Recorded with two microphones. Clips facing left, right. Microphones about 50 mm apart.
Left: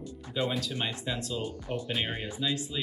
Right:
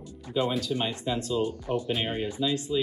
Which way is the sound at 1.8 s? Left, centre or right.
Centre.